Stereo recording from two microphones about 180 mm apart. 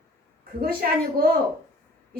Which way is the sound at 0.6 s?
55° right (ahead or behind).